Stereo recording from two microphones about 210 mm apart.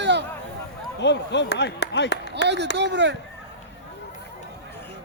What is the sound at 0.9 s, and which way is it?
Speech, 55° left (ahead or behind).